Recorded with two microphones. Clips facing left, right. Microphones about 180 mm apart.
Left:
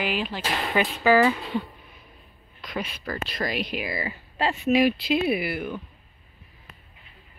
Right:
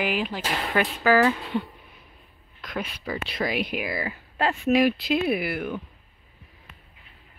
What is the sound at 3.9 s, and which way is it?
Speech, centre (ahead or behind).